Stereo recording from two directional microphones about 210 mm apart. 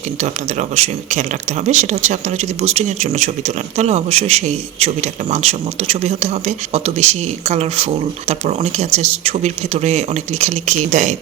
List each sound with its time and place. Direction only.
0.8 s speech: 30° right (ahead or behind)